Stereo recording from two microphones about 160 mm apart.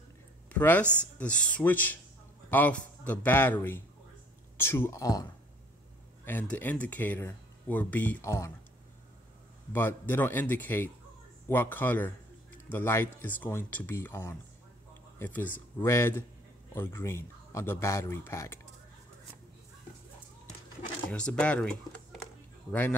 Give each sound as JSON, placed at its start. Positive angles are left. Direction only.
{"t": 0.5, "sound": "speech", "side_deg": 10}
{"t": 0.8, "sound": "speech", "side_deg": -15}
{"t": 1.2, "sound": "speech", "side_deg": 5}
{"t": 6.2, "sound": "speech", "side_deg": 10}
{"t": 9.7, "sound": "speech", "side_deg": 15}
{"t": 21.1, "sound": "speech", "side_deg": 5}